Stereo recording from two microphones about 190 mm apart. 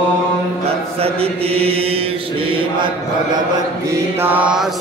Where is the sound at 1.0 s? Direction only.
30° right (ahead or behind).